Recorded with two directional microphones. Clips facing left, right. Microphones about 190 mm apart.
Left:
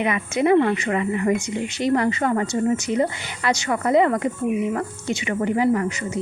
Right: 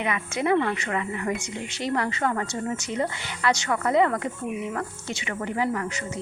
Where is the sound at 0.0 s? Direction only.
15° left (ahead or behind).